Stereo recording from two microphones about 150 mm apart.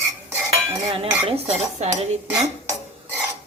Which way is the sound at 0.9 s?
40° right (ahead or behind).